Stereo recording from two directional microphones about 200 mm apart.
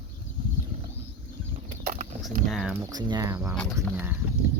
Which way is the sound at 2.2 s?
Centre (ahead or behind).